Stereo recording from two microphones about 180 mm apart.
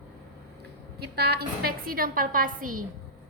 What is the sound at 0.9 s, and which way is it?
Speech, 65° right (ahead or behind).